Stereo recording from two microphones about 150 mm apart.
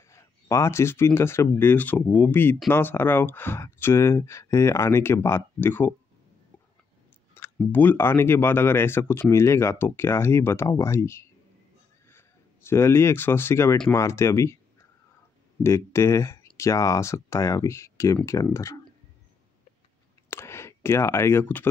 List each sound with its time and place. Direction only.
0.1 s speech: 20° left (ahead or behind)
7.3 s speech: 15° left (ahead or behind)
12.6 s speech: 15° left (ahead or behind)
15.6 s speech: 15° left (ahead or behind)
20.2 s a sound: 15° left (ahead or behind)